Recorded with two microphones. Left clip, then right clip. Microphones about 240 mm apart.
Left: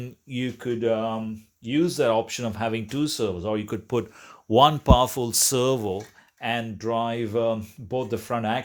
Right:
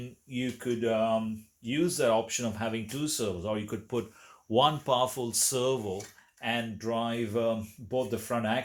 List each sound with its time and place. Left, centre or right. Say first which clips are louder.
0.0 s speech: left 4 dB; left